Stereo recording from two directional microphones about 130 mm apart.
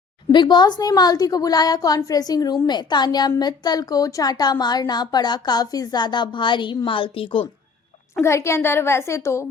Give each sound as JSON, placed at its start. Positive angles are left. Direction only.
{"t": 0.3, "sound": "a woman's voice", "side_deg": 35}
{"t": 8.2, "sound": "a woman's voice", "side_deg": 20}